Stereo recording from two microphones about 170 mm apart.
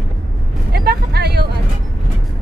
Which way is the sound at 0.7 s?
70° right (ahead or behind).